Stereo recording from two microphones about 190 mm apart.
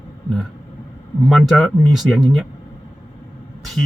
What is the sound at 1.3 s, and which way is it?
Speech, centre (ahead or behind).